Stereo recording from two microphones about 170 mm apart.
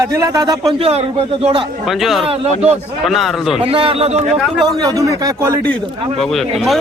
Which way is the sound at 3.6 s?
30° right (ahead or behind).